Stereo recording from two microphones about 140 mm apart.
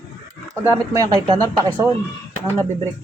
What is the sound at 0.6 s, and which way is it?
Speech, 20° right (ahead or behind).